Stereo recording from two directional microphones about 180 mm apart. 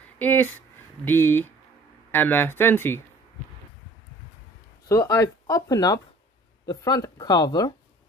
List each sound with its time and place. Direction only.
0.2 s speech: 10° left (ahead or behind)
4.8 s speech: 15° left (ahead or behind)